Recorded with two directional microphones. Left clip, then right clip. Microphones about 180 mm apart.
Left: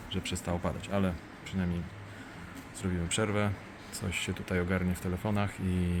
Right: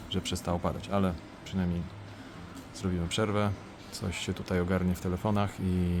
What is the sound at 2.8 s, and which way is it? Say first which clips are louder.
Speech: right 1 dB; 5° right (ahead or behind).